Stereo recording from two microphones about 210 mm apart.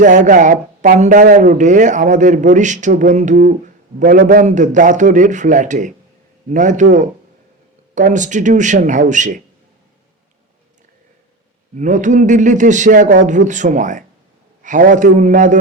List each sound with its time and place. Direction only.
0.0 s a man's voice: 35° right (ahead or behind)
7.9 s a man's voice: 35° right (ahead or behind)
11.8 s a man's voice: 35° right (ahead or behind)